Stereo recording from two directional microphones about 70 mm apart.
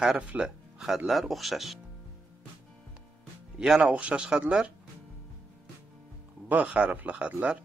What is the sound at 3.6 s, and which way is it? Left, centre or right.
Speech, centre.